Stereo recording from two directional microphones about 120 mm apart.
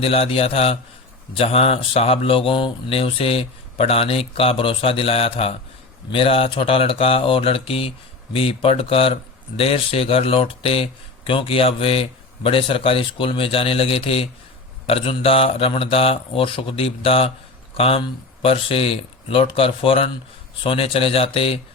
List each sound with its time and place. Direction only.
0.0 s a man's voice: 50° left (ahead or behind)